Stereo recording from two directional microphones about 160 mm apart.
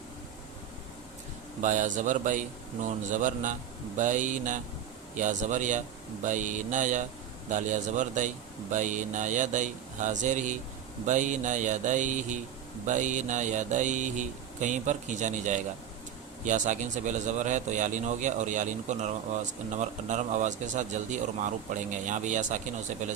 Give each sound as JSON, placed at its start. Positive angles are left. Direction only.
{"t": 1.6, "sound": "a man's voice", "side_deg": -50}